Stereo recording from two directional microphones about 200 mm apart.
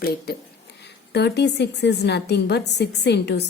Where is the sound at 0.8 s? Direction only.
55° left (ahead or behind).